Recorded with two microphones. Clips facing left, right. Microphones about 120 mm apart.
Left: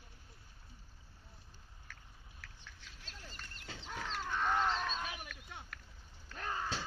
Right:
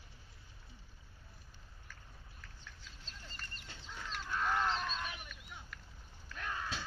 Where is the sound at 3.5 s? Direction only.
90° left.